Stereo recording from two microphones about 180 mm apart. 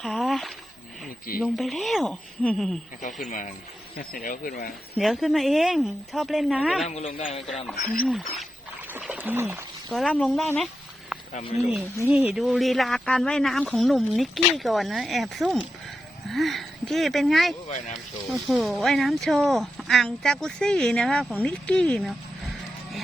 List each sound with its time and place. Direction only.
0.0 s speech: centre (ahead or behind)
3.0 s speech: 45° left (ahead or behind)
4.9 s speech: centre (ahead or behind)
6.8 s speech: 35° left (ahead or behind)
8.0 s speech: centre (ahead or behind)
8.9 s a sound: 10° right (ahead or behind)
9.9 s speech: centre (ahead or behind)
11.3 s speech: 40° left (ahead or behind)
12.1 s speech: 5° right (ahead or behind)